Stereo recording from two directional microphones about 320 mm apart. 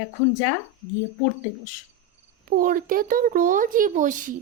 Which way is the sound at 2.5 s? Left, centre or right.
Right.